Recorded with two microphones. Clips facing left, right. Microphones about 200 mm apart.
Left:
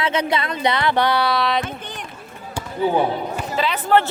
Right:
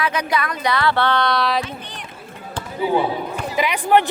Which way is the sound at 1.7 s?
50° left (ahead or behind).